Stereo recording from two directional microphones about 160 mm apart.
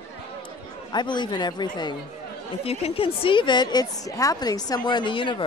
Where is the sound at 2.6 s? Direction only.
40° left (ahead or behind).